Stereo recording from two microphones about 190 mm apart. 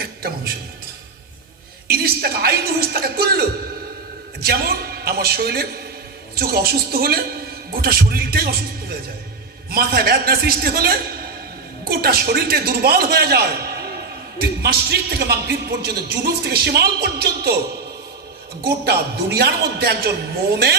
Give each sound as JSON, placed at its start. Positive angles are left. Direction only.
{"t": 0.0, "sound": "music", "side_deg": -50}
{"t": 1.9, "sound": "a man's voice", "side_deg": -55}
{"t": 9.6, "sound": "a man's voice", "side_deg": -55}
{"t": 18.9, "sound": "a man's voice", "side_deg": -60}